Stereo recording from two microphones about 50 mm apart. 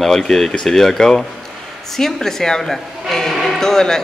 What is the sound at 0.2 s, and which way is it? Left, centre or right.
A woman's voice, centre.